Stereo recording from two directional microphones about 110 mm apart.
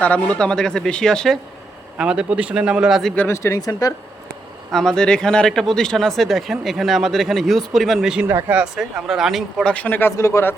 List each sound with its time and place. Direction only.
0.0 s speech: 10° left (ahead or behind)
2.0 s speech: 10° right (ahead or behind)
3.2 s speech: 25° left (ahead or behind)
4.7 s speech: 5° left (ahead or behind)
8.3 s speech: 25° right (ahead or behind)
8.5 s speech: 5° right (ahead or behind)
9.7 s speech: 15° left (ahead or behind)